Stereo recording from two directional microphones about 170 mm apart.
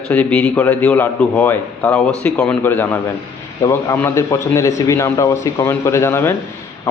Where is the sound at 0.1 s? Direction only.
5° left (ahead or behind).